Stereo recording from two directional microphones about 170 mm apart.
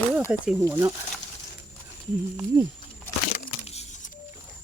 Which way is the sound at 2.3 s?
15° right (ahead or behind).